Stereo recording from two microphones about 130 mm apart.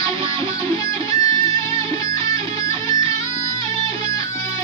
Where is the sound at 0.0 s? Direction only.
25° left (ahead or behind).